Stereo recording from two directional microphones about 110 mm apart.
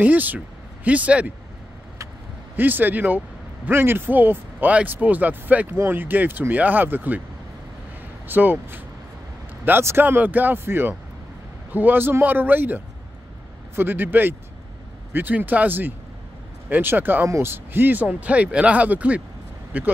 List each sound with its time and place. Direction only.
0.0 s speech: 15° right (ahead or behind)
2.5 s speech: 15° right (ahead or behind)
8.3 s speech: 15° right (ahead or behind)